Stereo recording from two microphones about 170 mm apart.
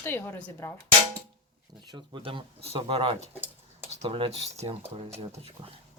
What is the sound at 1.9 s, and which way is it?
Speech, 30° right (ahead or behind).